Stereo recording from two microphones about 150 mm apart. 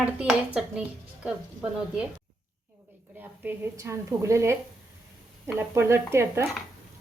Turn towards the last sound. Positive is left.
turn(degrees=-15)  # may be behind; listen again after turning